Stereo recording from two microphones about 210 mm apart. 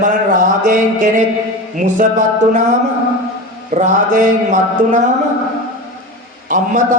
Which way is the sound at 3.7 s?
35° right (ahead or behind).